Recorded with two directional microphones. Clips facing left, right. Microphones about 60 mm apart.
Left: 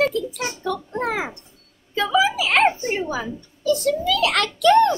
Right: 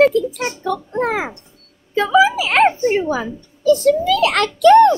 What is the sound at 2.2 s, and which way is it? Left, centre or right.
A woman's voice, centre.